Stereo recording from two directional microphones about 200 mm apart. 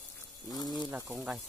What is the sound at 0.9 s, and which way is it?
Speech, 10° right (ahead or behind).